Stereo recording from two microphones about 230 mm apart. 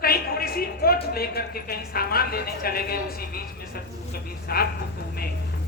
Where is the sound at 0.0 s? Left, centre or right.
Left.